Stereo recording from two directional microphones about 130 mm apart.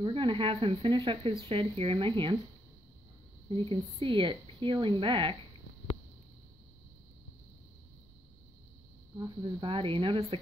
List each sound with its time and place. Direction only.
0.0 s speech: 40° right (ahead or behind)
3.4 s speech: 45° right (ahead or behind)
9.2 s speech: 40° right (ahead or behind)